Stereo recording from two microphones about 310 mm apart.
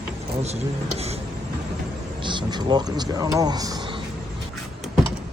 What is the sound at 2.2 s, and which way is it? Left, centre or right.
Speech, centre.